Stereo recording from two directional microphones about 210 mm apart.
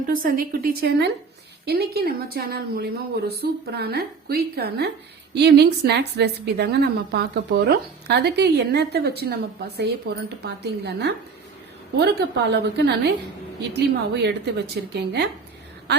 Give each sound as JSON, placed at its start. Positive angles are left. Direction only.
{"t": 0.1, "sound": "a woman's voice", "side_deg": -40}